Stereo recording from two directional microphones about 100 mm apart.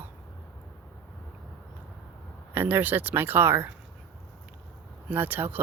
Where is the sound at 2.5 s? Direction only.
20° right (ahead or behind).